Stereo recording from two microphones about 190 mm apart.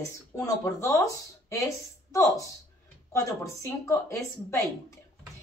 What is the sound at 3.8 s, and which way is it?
Speech, 15° left (ahead or behind).